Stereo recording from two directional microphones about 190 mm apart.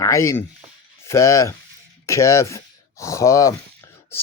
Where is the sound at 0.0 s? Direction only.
15° left (ahead or behind).